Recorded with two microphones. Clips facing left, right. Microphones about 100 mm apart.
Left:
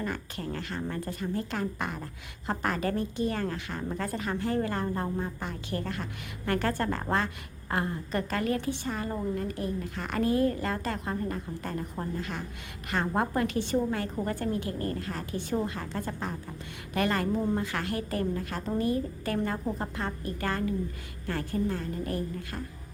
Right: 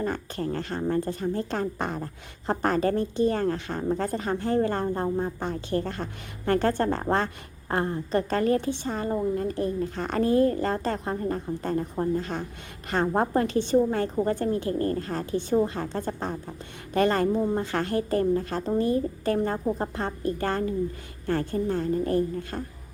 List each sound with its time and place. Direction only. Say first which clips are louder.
0.0 s a woman's voice: right 5 dB; 35° right (ahead or behind)
17.3 s a woman's voice: right 4 dB; 25° right (ahead or behind)